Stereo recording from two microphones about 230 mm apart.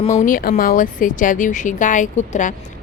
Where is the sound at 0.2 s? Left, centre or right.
Left.